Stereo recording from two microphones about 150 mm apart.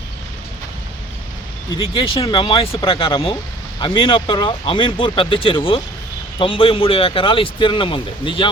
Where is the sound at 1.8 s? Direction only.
40° left (ahead or behind).